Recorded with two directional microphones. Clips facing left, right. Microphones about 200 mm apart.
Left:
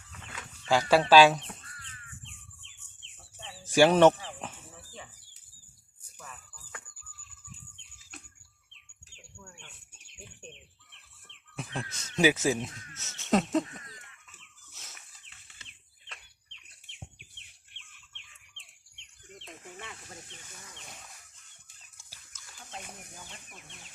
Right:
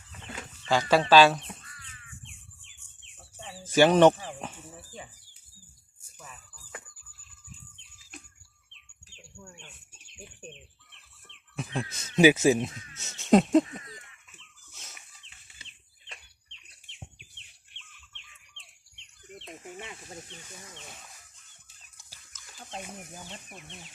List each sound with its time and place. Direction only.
0.7 s speech: 10° left (ahead or behind)
3.7 s speech: 10° left (ahead or behind)
11.7 s speech: 15° right (ahead or behind)
13.0 s a sound: 15° right (ahead or behind)
19.5 s bird: 20° right (ahead or behind)